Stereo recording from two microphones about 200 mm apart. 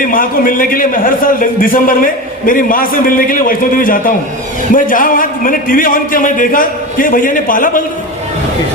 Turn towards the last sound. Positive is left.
turn(degrees=40)  # may be behind; listen again after turning